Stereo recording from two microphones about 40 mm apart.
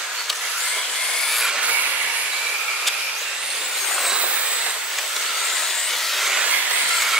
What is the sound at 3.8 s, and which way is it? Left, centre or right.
Vehicle, centre.